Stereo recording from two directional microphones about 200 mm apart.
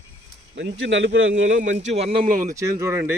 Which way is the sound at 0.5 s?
65° right (ahead or behind).